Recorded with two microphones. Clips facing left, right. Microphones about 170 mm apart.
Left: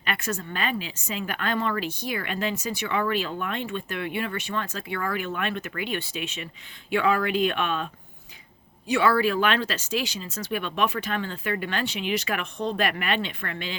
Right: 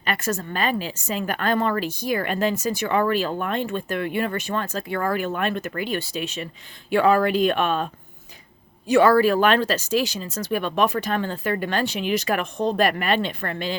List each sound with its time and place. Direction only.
0.0 s a woman's voice: 40° right (ahead or behind)
8.9 s a woman's voice: 45° right (ahead or behind)